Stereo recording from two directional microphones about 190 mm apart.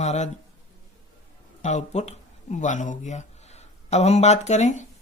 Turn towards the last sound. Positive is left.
turn(degrees=35)  # may be behind; listen again after turning